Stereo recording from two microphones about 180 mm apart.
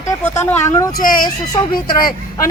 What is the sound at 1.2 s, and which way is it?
Speech, 25° left (ahead or behind).